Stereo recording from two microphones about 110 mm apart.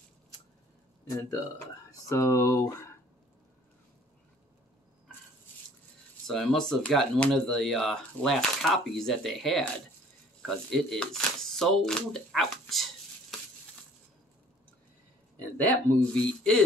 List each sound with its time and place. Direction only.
1.9 s speech: 25° left (ahead or behind)
6.2 s speech: 5° left (ahead or behind)
15.5 s speech: 10° left (ahead or behind)